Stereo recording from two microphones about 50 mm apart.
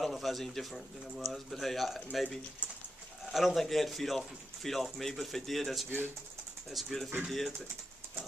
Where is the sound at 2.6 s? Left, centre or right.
Left.